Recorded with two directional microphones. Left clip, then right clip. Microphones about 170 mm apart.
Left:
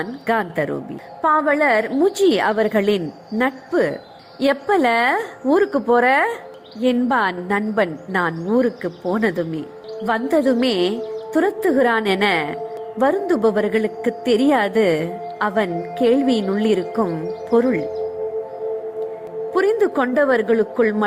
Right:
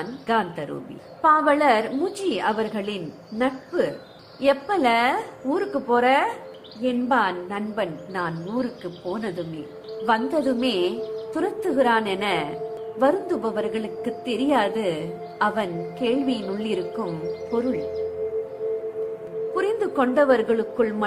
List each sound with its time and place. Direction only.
0.3 s a woman's voice: 40° left (ahead or behind)
2.3 s a woman's voice: 45° left (ahead or behind)
19.5 s a woman's voice: 35° left (ahead or behind)